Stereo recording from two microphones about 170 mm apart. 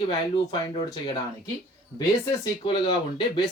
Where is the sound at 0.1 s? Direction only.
25° left (ahead or behind).